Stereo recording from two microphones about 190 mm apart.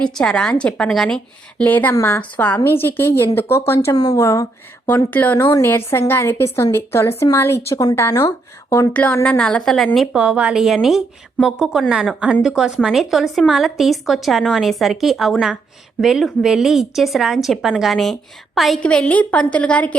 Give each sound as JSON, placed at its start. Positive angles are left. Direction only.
{"t": 0.0, "sound": "a woman's voice", "side_deg": 5}